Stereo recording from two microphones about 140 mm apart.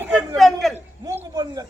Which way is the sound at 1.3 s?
30° right (ahead or behind).